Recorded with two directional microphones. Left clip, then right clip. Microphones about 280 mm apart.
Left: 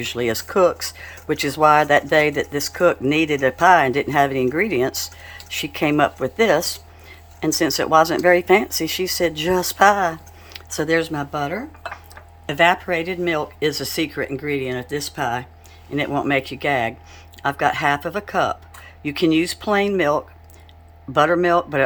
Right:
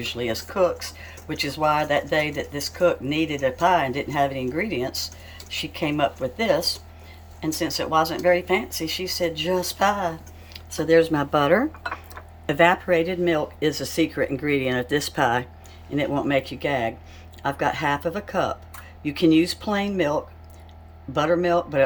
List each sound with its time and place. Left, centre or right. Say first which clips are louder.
0.0 s speech: left 5 dB; centre